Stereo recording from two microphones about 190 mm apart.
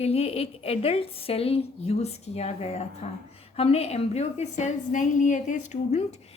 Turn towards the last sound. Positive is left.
turn(degrees=35)  # may be behind; listen again after turning